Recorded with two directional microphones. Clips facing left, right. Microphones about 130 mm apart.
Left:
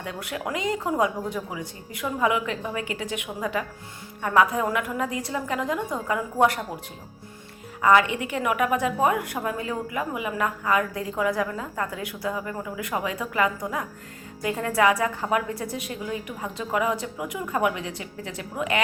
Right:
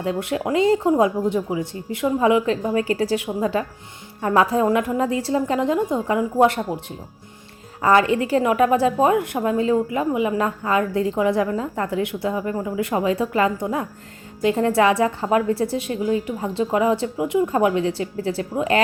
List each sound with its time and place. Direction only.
0.0 s a woman's voice: 25° right (ahead or behind)
2.6 s a woman's voice: 40° right (ahead or behind)
7.8 s a woman's voice: 35° right (ahead or behind)